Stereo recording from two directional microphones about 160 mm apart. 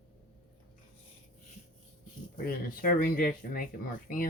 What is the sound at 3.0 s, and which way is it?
Speech, 60° left (ahead or behind).